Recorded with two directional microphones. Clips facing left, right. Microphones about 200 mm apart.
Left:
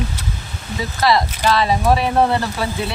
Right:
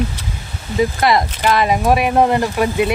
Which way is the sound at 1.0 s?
20° right (ahead or behind).